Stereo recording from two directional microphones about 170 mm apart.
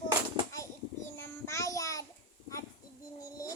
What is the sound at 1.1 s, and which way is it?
Child singing, 15° left (ahead or behind).